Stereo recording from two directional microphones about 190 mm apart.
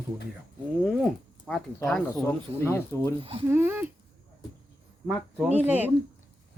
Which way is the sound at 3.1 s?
30° right (ahead or behind).